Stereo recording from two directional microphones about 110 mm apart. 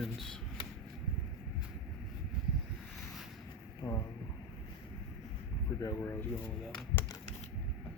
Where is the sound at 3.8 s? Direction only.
45° left (ahead or behind).